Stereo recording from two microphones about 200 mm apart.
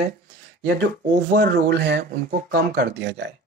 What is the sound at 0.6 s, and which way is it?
Speech, 55° right (ahead or behind).